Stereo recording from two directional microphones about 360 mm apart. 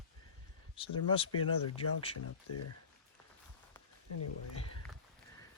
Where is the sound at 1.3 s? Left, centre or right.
Left.